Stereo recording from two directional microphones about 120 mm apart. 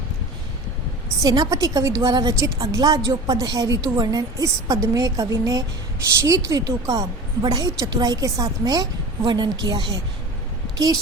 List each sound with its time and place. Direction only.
1.2 s a woman's voice: 30° right (ahead or behind)